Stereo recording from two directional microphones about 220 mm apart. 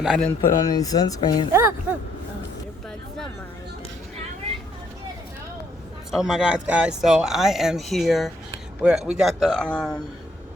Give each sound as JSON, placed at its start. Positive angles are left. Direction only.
{"t": 0.0, "sound": "speech", "side_deg": -5}
{"t": 0.3, "sound": "speech", "side_deg": 15}
{"t": 6.1, "sound": "speech", "side_deg": 0}